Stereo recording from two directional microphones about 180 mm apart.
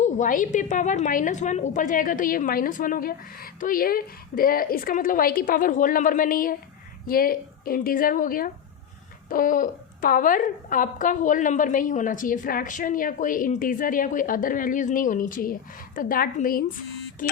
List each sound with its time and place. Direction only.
0.0 s a woman's voice: 45° left (ahead or behind)